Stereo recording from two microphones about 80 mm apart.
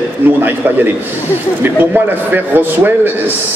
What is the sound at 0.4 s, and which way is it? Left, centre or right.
A man's voice, right.